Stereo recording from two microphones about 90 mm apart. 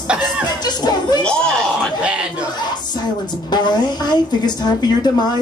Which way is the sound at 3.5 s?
55° left (ahead or behind).